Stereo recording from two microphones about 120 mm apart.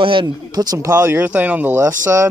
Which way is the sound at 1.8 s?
25° right (ahead or behind).